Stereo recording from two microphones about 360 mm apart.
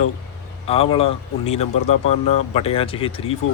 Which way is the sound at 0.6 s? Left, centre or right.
Centre.